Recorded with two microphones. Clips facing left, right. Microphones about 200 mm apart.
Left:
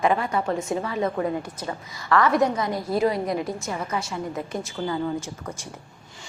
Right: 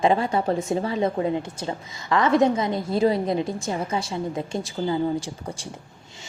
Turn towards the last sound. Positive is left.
turn(degrees=-30)  # may be behind; listen again after turning